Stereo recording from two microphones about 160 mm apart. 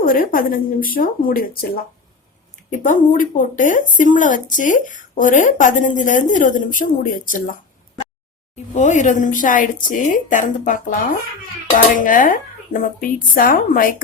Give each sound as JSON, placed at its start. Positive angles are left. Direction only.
{"t": 0.0, "sound": "speech", "side_deg": 60}
{"t": 2.6, "sound": "speech", "side_deg": 50}